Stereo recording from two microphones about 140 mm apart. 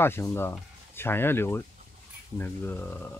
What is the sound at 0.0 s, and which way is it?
Speech, 15° left (ahead or behind).